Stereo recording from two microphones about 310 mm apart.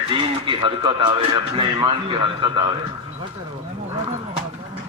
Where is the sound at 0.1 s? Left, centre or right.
Centre.